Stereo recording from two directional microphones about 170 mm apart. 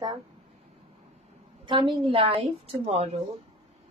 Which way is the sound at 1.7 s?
30° right (ahead or behind).